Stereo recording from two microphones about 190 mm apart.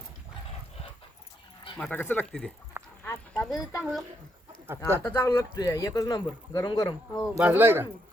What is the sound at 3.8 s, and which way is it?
Speech, 5° right (ahead or behind).